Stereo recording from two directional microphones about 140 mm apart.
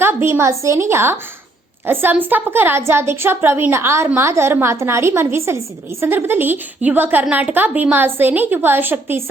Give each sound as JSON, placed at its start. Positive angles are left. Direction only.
{"t": 0.0, "sound": "a woman's voice", "side_deg": -15}